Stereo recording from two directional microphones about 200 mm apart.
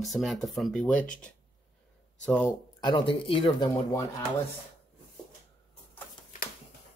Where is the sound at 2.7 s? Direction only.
25° left (ahead or behind).